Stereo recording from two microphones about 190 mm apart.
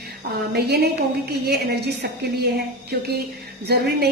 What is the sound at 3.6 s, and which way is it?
Speech, 60° right (ahead or behind).